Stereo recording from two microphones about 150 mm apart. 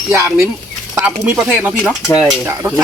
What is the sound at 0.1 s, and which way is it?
Speech, 15° right (ahead or behind).